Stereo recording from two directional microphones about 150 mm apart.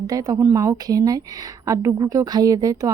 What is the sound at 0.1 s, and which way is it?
Speech, 20° right (ahead or behind).